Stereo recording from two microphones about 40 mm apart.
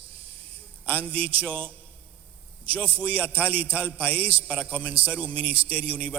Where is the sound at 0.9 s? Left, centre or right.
Left.